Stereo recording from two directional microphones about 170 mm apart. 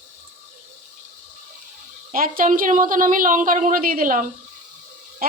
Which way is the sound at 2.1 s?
55° right (ahead or behind).